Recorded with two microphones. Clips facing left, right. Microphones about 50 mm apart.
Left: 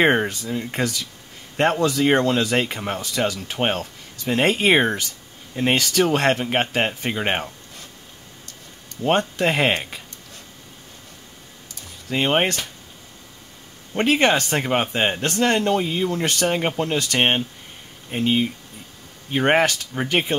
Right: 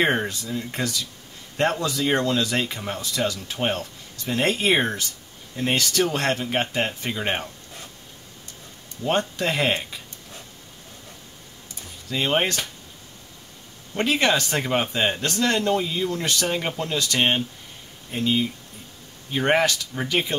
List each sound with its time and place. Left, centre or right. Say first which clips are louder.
0.0 s speech: left 4 dB; left
0.3 s speech: left 3 dB; left
1.8 s speech: left 5 dB; left
9.4 s speech: left 3 dB; left
12.1 s speech: left 3 dB; left
13.9 s speech: left 3 dB; left
14.6 s speech: left 2 dB; centre; by 20.3 s left